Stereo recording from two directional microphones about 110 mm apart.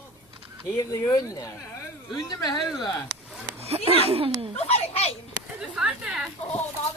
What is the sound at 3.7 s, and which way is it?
Speech, 65° right (ahead or behind).